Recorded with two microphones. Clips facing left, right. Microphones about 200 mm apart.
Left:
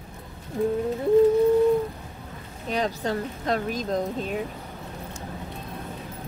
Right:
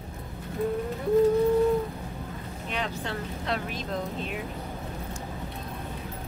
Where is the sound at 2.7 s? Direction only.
40° left (ahead or behind).